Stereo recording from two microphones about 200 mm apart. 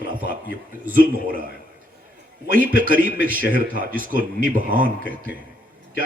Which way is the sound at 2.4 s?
45° right (ahead or behind).